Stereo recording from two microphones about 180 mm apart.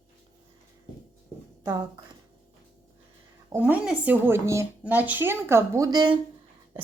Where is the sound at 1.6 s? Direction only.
20° right (ahead or behind).